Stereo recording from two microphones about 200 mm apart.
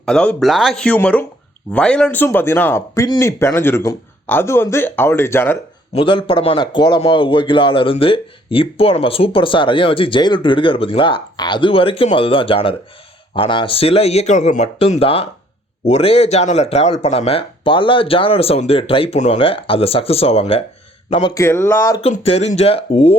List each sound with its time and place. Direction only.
0.0 s speech: 5° left (ahead or behind)
5.9 s a man's voice: 25° left (ahead or behind)
21.3 s speech: 10° left (ahead or behind)
22.0 s speech: 30° left (ahead or behind)